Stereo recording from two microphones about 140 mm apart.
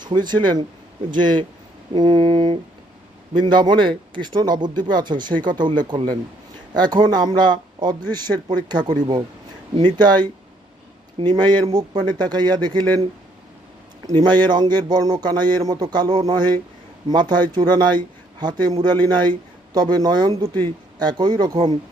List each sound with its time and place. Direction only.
0.0 s speech: 30° right (ahead or behind)
14.1 s speech: 30° right (ahead or behind)